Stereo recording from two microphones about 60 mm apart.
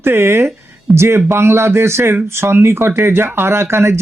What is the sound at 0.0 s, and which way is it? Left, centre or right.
Speech, right.